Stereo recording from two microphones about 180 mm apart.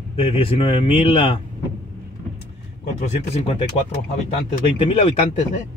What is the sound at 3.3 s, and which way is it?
Speech, 35° left (ahead or behind).